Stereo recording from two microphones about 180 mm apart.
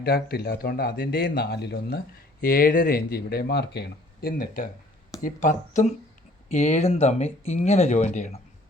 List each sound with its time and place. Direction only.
0.0 s speech: 55° left (ahead or behind); by 8.4 s 40° left (ahead or behind)